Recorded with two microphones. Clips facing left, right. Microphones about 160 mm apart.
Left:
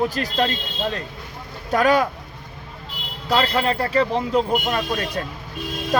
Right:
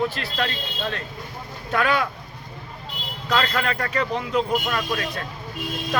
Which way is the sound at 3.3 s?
30° left (ahead or behind).